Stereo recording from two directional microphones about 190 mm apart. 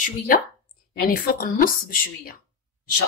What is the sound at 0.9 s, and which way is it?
A woman's voice, 50° left (ahead or behind).